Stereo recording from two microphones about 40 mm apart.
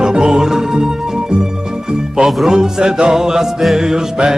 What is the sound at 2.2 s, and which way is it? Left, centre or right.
Speech, centre.